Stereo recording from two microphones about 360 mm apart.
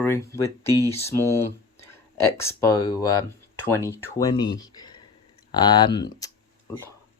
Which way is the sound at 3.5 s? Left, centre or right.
Centre.